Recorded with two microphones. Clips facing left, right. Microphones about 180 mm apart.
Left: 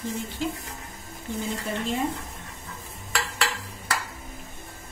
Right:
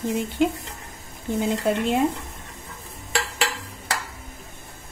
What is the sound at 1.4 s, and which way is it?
Speech, 70° right (ahead or behind).